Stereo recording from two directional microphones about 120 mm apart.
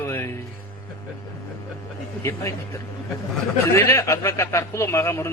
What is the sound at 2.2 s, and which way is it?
Speech, 25° left (ahead or behind).